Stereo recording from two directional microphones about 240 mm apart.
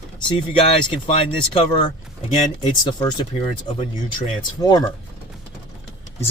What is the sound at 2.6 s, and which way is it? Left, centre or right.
Speech, centre.